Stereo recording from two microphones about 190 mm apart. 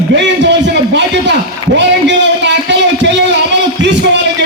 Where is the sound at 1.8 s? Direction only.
70° right (ahead or behind).